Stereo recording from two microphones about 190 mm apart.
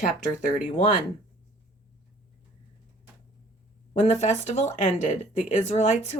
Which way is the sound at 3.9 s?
35° left (ahead or behind).